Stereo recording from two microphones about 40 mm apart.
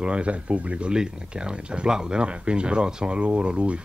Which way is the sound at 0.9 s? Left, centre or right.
Right.